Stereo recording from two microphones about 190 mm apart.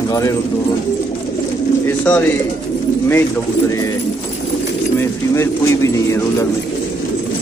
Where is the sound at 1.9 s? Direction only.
5° left (ahead or behind).